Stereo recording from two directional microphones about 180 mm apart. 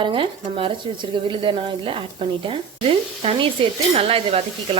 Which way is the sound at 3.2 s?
30° right (ahead or behind).